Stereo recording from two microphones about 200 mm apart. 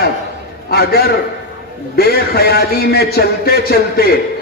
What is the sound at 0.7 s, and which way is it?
A man's voice, 50° left (ahead or behind).